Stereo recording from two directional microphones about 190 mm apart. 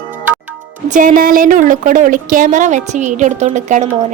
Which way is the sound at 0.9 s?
45° right (ahead or behind).